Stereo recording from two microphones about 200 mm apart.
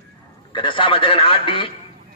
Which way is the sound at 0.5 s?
25° left (ahead or behind).